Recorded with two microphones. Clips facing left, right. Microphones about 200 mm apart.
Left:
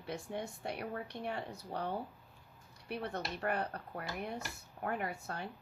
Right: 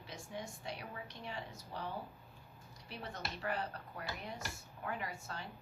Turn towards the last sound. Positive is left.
turn(degrees=55)  # may be behind; listen again after turning